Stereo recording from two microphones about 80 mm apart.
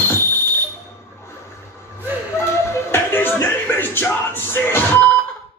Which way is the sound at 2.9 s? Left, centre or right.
Left.